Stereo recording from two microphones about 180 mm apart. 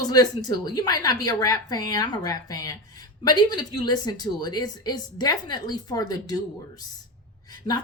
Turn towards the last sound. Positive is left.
turn(degrees=20)  # may be behind; listen again after turning